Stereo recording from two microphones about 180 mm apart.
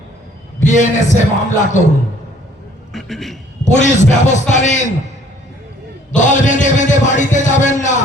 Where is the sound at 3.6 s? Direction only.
40° left (ahead or behind).